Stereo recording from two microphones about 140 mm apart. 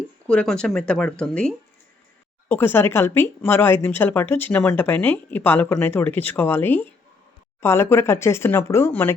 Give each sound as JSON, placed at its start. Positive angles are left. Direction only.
{"t": 0.3, "sound": "speech", "side_deg": 5}